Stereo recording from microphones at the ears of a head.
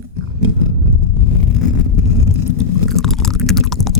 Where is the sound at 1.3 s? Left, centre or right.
Left.